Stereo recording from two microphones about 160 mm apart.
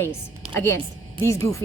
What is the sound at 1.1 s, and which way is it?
Speech, 15° left (ahead or behind).